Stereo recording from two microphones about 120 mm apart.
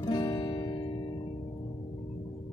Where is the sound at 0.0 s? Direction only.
40° left (ahead or behind).